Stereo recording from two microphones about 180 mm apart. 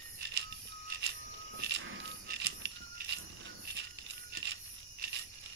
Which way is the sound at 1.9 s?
75° right (ahead or behind).